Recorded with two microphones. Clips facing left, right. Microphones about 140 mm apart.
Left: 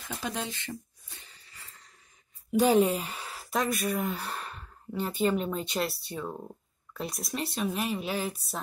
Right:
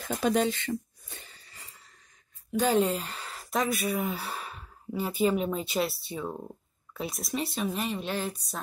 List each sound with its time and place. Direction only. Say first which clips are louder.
0.1 s speech: right 9 dB; 55° right (ahead or behind)
2.5 s speech: left 2 dB; 10° left (ahead or behind)